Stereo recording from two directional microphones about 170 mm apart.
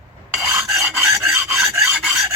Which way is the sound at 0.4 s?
15° right (ahead or behind).